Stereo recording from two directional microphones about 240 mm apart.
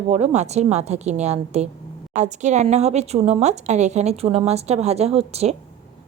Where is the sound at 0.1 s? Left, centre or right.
Right.